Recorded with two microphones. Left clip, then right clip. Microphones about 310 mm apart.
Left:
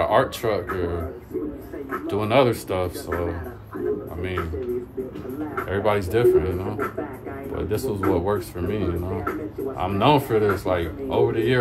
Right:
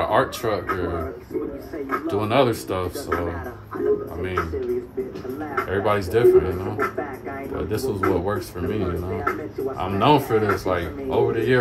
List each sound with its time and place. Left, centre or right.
0.0 s speech: centre
2.0 s speech: centre
5.7 s speech: centre